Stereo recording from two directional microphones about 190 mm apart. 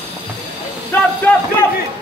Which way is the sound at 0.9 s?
5° left (ahead or behind).